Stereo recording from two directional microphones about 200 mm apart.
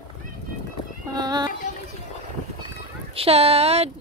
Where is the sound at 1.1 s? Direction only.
20° right (ahead or behind).